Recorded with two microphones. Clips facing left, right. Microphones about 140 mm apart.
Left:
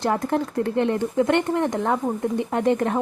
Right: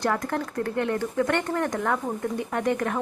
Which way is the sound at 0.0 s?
25° left (ahead or behind).